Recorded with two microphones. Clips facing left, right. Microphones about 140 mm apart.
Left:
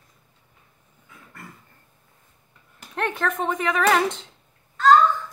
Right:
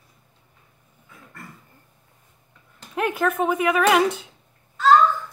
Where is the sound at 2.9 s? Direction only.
5° right (ahead or behind).